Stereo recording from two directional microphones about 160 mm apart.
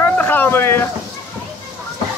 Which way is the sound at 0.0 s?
10° left (ahead or behind).